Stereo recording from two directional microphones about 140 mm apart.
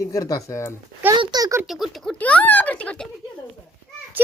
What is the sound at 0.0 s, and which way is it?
Speech, 25° left (ahead or behind).